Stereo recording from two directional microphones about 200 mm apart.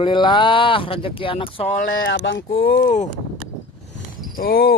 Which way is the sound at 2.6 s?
50° left (ahead or behind).